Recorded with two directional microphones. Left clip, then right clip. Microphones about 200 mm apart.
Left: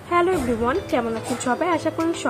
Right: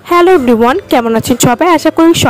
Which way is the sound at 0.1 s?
60° right (ahead or behind).